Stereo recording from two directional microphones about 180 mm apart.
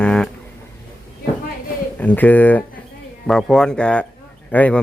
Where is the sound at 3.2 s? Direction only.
5° left (ahead or behind).